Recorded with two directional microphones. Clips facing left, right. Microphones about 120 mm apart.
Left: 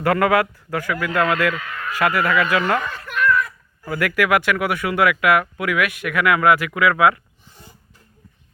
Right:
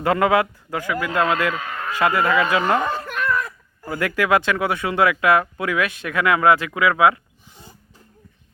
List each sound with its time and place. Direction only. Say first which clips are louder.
0.0 s a man's voice: even; 20° right (ahead or behind)